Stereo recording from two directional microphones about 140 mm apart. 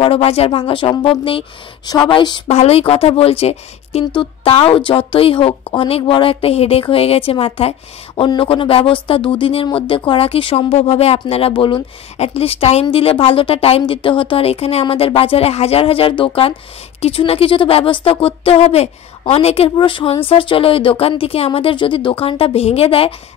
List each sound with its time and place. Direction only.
0.0 s speech: 40° left (ahead or behind)
2.4 s speech: 50° left (ahead or behind)